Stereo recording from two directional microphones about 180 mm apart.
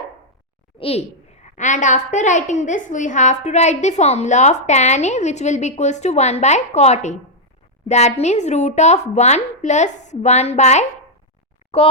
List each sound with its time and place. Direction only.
0.8 s a woman's voice: 35° left (ahead or behind)